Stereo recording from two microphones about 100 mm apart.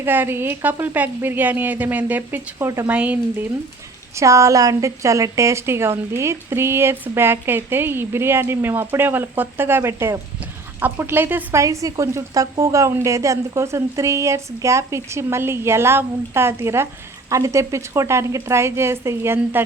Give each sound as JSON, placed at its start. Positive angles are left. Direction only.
{"t": 0.0, "sound": "a woman's voice", "side_deg": -20}
{"t": 2.9, "sound": "speech", "side_deg": -15}
{"t": 4.2, "sound": "a woman's voice", "side_deg": -30}
{"t": 11.6, "sound": "a woman's voice", "side_deg": -35}